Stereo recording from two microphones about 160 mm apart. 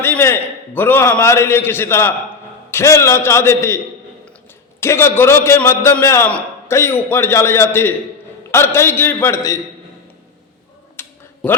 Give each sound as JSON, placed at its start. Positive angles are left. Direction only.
{"t": 0.0, "sound": "a man's voice", "side_deg": 15}
{"t": 4.8, "sound": "a man's voice", "side_deg": 15}
{"t": 11.0, "sound": "a sound", "side_deg": 15}